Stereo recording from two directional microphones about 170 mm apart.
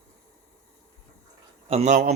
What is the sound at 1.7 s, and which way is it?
Speech, 40° right (ahead or behind).